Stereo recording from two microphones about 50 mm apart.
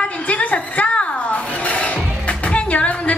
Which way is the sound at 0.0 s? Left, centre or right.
Left.